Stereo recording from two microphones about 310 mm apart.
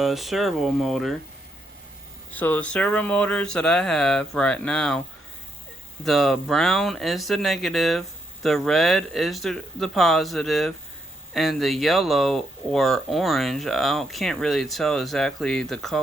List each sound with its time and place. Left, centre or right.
0.0 s speech: centre
2.3 s speech: centre
6.1 s speech: centre